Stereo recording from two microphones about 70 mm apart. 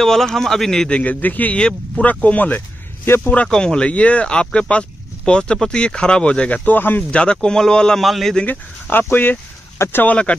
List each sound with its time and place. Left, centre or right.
0.0 s speech: centre; by 2.6 s left
3.4 s speech: centre; by 7.1 s left
7.1 s speech: centre
8.5 s speech: left